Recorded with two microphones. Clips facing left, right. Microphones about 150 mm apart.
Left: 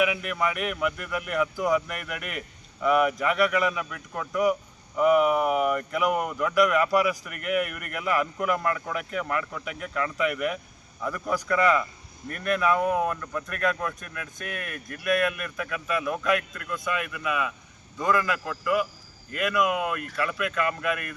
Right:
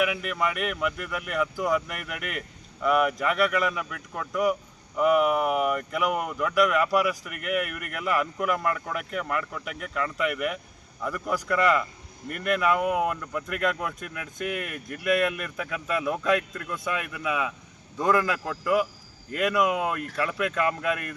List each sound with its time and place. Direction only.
0.0 s a man's voice: centre (ahead or behind); by 20.0 s 30° right (ahead or behind)